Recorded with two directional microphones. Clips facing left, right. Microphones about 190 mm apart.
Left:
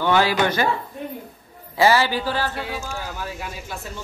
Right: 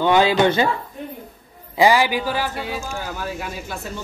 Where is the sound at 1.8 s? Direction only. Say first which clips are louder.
Right 2 dB; 15° right (ahead or behind).